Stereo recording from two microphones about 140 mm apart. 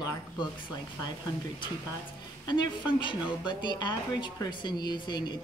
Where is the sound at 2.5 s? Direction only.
30° left (ahead or behind).